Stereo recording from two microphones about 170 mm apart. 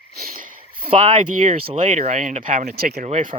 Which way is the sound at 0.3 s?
55° right (ahead or behind).